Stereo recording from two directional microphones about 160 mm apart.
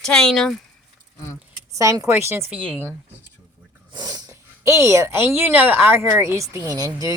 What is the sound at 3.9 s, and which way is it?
Snort, 25° right (ahead or behind).